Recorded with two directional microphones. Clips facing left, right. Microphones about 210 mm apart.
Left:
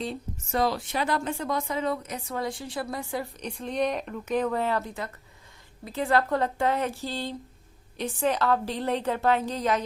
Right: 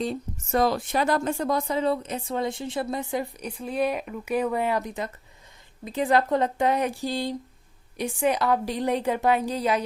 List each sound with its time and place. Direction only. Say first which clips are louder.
0.0 s a woman's voice: right 4 dB; 45° right (ahead or behind); by 3.2 s 20° right (ahead or behind)
3.4 s a woman's voice: left 1 dB; 5° right (ahead or behind)